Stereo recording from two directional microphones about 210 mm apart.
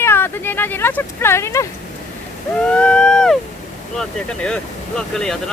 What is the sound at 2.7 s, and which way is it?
Speech, 5° left (ahead or behind).